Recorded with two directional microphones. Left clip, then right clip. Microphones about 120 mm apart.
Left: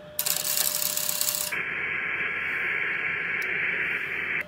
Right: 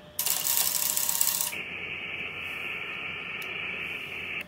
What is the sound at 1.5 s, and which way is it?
Radio, 20° left (ahead or behind).